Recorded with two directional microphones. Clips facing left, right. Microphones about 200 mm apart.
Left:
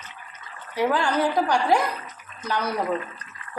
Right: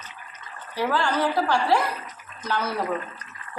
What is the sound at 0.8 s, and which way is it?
A woman's voice, 15° left (ahead or behind).